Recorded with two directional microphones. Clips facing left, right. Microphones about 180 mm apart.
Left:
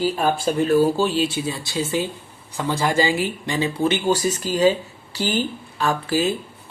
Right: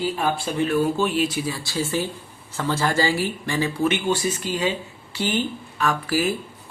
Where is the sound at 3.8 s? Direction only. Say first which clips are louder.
Left 3 dB; 35° left (ahead or behind).